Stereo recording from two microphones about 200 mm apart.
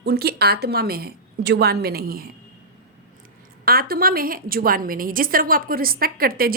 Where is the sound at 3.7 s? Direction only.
50° right (ahead or behind).